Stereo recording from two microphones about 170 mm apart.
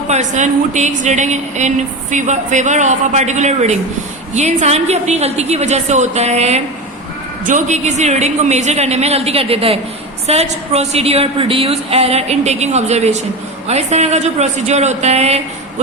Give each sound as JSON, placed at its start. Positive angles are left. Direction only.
{"t": 0.1, "sound": "a woman's voice", "side_deg": -45}